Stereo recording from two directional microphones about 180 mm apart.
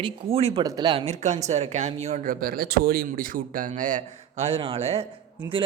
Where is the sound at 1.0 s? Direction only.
40° right (ahead or behind).